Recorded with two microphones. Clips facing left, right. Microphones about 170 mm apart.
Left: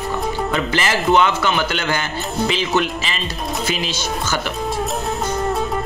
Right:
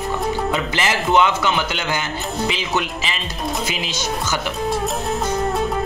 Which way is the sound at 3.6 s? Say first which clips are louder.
Left 2 dB; 15° right (ahead or behind).